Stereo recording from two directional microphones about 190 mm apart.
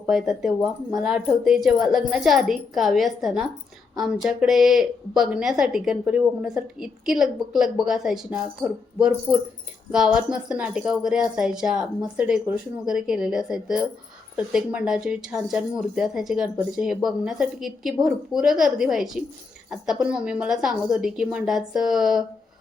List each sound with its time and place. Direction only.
0.1 s a woman's voice: centre (ahead or behind)